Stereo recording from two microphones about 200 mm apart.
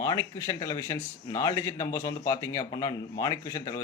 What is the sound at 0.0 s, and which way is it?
Speech, 20° left (ahead or behind).